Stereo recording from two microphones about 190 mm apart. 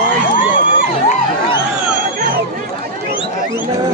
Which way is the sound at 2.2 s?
45° right (ahead or behind).